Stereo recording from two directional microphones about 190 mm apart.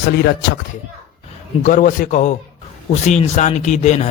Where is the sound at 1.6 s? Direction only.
45° left (ahead or behind).